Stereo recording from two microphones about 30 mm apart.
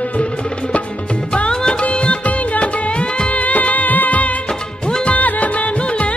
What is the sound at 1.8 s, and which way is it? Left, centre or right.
Music, left.